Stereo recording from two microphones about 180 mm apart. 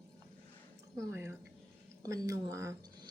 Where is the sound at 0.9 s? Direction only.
15° right (ahead or behind).